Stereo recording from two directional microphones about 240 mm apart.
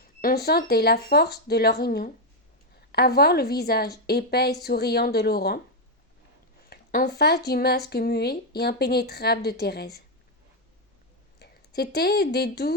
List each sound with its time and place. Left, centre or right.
0.0 s speech: left
6.7 s speech: left
11.3 s speech: left